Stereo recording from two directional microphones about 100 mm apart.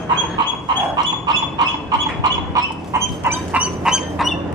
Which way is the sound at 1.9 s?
40° right (ahead or behind).